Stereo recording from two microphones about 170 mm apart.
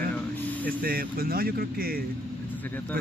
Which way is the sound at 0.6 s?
60° right (ahead or behind).